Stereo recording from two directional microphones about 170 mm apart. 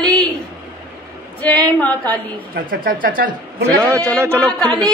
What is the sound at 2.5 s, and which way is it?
Speech, 55° right (ahead or behind).